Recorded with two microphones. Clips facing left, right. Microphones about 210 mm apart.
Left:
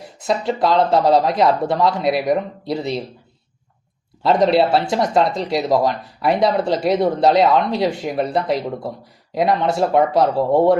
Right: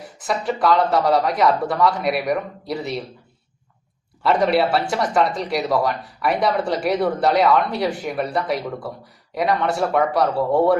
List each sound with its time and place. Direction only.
0.3 s speech: 25° left (ahead or behind)
4.2 s speech: 25° left (ahead or behind)